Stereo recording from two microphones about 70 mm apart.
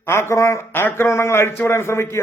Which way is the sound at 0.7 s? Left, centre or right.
Left.